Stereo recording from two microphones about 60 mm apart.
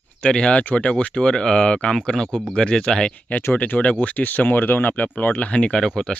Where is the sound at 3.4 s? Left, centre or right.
Left.